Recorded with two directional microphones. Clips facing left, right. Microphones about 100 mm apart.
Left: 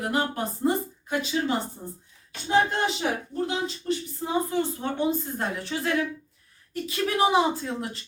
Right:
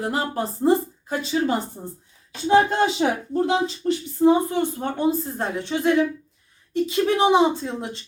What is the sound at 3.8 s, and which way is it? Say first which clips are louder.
Speech: right 3 dB; 60° right (ahead or behind).